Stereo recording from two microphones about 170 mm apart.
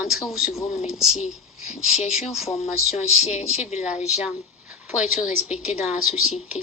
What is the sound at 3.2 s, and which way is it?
Speech, 40° left (ahead or behind).